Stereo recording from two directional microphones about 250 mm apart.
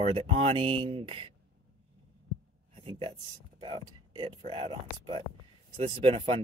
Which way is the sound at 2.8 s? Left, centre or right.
Right.